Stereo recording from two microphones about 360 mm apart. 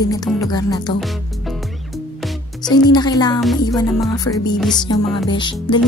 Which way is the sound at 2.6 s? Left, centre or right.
Centre.